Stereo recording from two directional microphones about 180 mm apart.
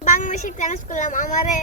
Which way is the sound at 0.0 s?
45° left (ahead or behind).